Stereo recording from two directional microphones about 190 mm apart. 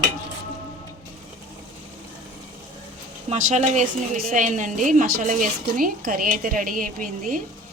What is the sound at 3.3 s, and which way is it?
A woman's voice, 40° right (ahead or behind).